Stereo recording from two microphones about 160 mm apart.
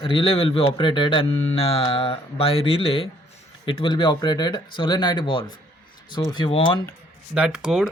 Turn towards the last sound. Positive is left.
turn(degrees=-5)  # may be behind; listen again after turning